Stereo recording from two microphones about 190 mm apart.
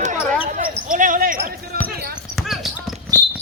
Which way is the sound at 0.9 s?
45° right (ahead or behind).